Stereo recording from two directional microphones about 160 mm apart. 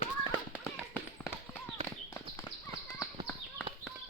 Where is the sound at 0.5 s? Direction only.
5° right (ahead or behind).